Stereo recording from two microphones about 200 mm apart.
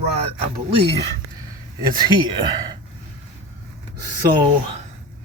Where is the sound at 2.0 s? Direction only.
20° right (ahead or behind).